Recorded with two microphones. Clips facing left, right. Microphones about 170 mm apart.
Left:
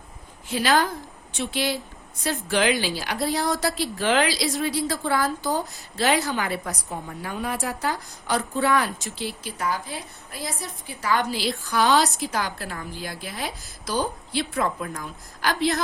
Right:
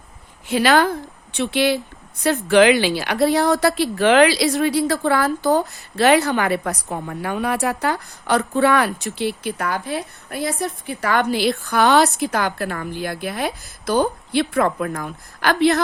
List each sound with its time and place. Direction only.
0.4 s a woman's voice: 70° right (ahead or behind)